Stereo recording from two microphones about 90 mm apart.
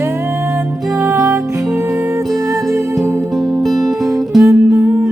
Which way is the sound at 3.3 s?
5° right (ahead or behind).